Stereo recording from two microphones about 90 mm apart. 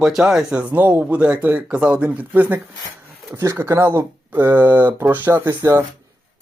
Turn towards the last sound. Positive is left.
turn(degrees=-30)  # may be behind; listen again after turning